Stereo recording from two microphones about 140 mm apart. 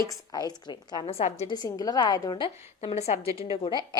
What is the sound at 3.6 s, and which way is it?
Speech, 35° left (ahead or behind).